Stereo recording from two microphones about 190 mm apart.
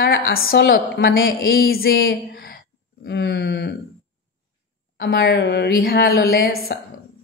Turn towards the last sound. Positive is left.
turn(degrees=55)  # may be behind; listen again after turning